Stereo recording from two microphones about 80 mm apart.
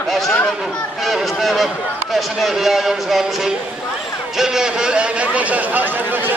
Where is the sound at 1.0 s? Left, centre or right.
Centre.